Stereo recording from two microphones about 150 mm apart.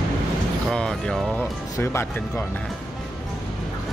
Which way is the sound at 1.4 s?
15° left (ahead or behind).